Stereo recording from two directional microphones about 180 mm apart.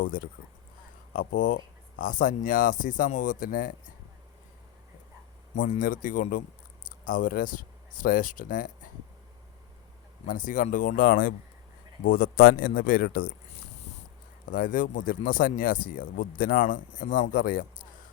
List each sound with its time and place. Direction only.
0.1 s speech: 50° left (ahead or behind)
5.5 s speech: 45° left (ahead or behind)
10.2 s speech: 45° left (ahead or behind)
14.5 s speech: 45° left (ahead or behind)